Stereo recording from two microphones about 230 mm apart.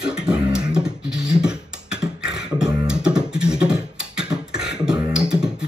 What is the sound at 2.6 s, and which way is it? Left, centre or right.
Beatboxing, centre.